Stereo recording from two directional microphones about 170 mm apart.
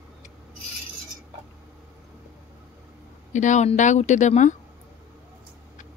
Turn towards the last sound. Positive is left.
turn(degrees=45)  # may be behind; listen again after turning